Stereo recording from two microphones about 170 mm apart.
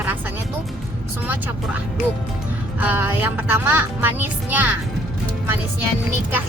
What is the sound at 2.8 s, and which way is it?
A child's voice, 10° right (ahead or behind).